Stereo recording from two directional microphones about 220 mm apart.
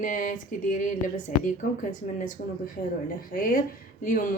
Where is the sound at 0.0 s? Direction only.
35° left (ahead or behind).